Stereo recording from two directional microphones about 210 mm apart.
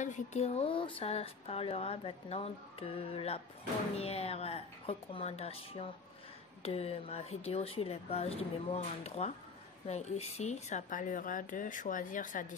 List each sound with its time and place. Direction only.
0.0 s speech: 35° left (ahead or behind)